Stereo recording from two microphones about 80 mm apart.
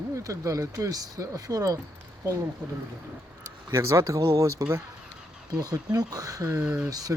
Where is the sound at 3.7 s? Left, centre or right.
Right.